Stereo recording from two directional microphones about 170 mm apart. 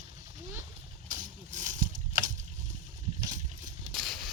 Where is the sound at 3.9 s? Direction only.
Centre (ahead or behind).